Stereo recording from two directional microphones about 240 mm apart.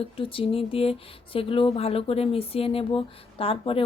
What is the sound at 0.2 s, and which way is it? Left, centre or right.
Speech, left.